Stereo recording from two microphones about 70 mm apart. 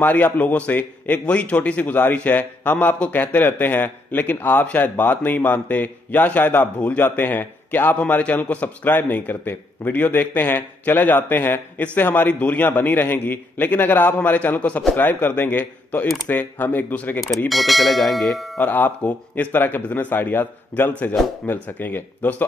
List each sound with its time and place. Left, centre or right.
0.0 s a man's voice: left
17.5 s speech: centre
18.6 s a man's voice: left